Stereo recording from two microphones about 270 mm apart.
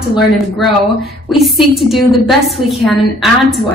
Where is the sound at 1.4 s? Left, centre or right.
Centre.